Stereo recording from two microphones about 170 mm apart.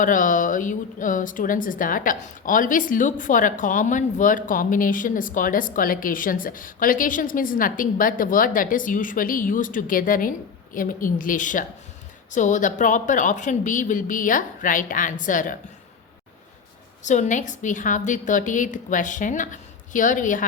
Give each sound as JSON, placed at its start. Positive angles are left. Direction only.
{"t": 0.0, "sound": "a woman's voice", "side_deg": 50}
{"t": 17.0, "sound": "a woman's voice", "side_deg": 45}